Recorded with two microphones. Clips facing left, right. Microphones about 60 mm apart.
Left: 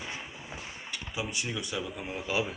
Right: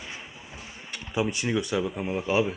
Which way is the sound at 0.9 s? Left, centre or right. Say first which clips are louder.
Right 8 dB; right.